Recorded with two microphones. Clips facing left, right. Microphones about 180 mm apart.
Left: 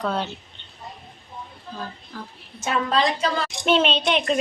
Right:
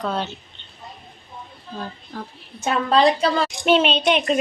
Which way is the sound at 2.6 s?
35° right (ahead or behind).